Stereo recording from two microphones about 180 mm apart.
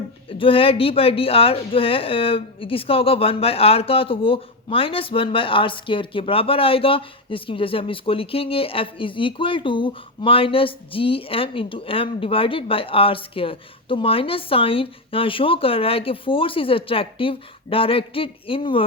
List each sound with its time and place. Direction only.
0.3 s speech: 30° left (ahead or behind)